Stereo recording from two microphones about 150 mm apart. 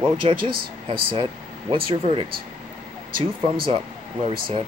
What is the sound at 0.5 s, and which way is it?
Speech, 85° right.